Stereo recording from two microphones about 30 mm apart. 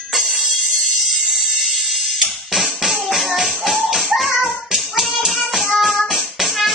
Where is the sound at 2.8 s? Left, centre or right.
Centre.